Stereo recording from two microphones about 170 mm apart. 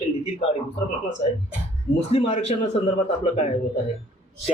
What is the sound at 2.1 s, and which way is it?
Speech, 40° left (ahead or behind).